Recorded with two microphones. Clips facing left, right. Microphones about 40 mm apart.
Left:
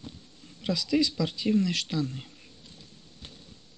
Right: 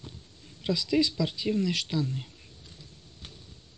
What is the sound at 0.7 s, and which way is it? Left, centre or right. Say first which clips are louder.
Speech: even; right.